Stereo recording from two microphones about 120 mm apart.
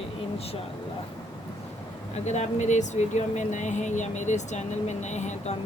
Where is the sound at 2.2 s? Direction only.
75° left (ahead or behind).